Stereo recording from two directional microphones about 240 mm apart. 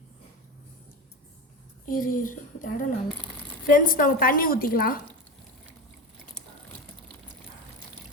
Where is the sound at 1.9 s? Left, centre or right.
Left.